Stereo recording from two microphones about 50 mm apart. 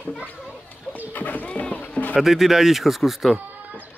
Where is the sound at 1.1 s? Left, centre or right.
Left.